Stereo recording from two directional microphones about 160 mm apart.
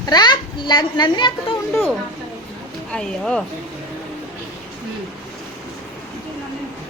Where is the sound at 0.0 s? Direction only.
25° left (ahead or behind).